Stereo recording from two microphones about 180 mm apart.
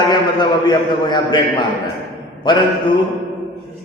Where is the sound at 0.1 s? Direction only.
25° left (ahead or behind).